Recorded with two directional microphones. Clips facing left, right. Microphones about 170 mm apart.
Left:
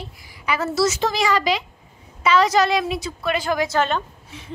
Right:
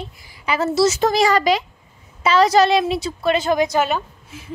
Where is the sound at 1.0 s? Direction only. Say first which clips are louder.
Right 4 dB; 40° right (ahead or behind); by 4.5 s 5° right (ahead or behind).